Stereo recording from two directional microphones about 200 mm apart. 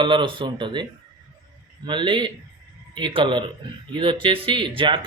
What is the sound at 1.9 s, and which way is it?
Speech, 25° right (ahead or behind).